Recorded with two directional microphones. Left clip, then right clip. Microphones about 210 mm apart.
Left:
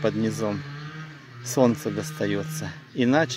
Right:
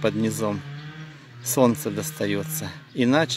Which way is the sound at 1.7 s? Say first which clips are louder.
Right 1 dB; 10° right (ahead or behind).